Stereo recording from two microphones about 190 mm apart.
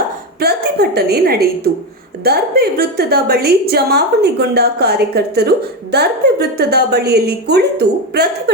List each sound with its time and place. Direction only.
0.3 s a woman's voice: 55° right (ahead or behind)